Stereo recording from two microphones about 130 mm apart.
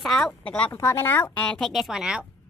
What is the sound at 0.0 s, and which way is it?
Speech, centre (ahead or behind).